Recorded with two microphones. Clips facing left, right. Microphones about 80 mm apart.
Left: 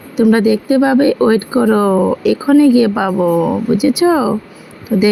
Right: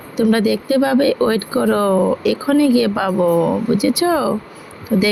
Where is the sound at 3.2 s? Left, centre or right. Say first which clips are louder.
Left 1 dB; centre.